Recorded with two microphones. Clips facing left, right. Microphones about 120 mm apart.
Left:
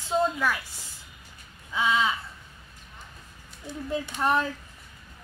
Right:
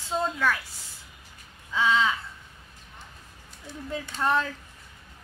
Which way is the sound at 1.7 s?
15° left (ahead or behind).